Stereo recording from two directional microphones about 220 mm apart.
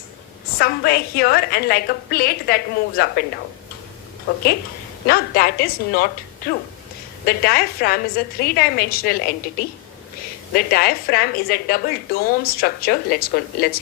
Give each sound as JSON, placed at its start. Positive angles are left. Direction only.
{"t": 0.6, "sound": "a woman's voice", "side_deg": 45}
{"t": 5.0, "sound": "a woman's voice", "side_deg": 45}